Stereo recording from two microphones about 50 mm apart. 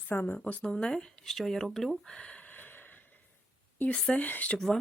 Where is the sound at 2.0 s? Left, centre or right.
Left.